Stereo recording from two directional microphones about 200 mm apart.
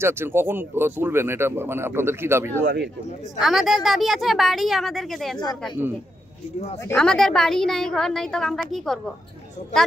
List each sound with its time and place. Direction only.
0.0 s speech: 10° right (ahead or behind)
2.6 s speech: 60° right (ahead or behind)
3.3 s a woman's voice: centre (ahead or behind)
7.0 s a woman's voice: 5° left (ahead or behind)